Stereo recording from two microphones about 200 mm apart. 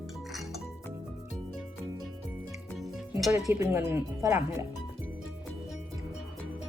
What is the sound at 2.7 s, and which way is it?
Music, centre (ahead or behind).